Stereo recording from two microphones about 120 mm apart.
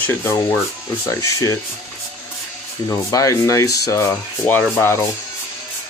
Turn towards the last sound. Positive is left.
turn(degrees=20)  # may be behind; listen again after turning